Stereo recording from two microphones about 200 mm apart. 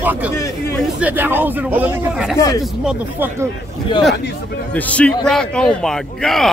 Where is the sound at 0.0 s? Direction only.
10° right (ahead or behind).